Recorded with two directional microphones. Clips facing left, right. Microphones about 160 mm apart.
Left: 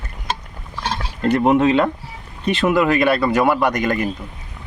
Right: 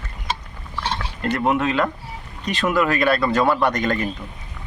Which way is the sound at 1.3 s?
25° left (ahead or behind).